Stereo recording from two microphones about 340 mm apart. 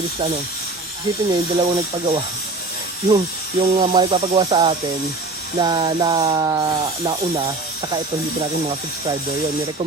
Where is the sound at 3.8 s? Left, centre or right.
Centre.